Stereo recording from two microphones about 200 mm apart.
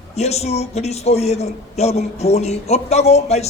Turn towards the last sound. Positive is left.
turn(degrees=30)  # may be behind; listen again after turning